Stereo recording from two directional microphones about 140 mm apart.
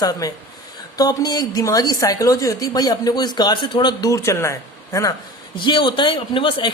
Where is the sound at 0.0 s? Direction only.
25° left (ahead or behind).